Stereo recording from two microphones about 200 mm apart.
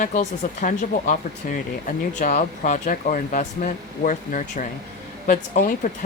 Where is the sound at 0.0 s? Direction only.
35° left (ahead or behind).